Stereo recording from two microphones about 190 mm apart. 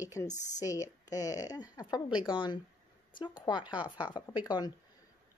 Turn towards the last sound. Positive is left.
turn(degrees=20)  # may be behind; listen again after turning